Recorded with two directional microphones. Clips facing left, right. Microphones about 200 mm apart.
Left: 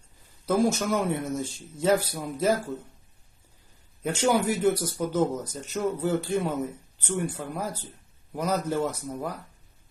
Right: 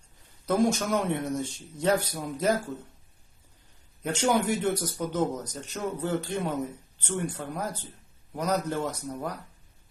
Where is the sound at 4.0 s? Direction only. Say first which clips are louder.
Left 1 dB; 5° left (ahead or behind).